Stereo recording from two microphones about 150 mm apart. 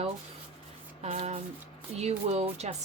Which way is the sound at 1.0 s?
40° right (ahead or behind).